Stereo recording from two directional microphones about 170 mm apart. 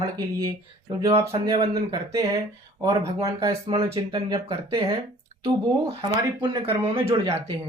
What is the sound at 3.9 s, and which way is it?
Speech, 30° right (ahead or behind).